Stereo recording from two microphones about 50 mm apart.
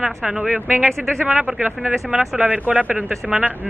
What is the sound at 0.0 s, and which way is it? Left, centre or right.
Speech, centre.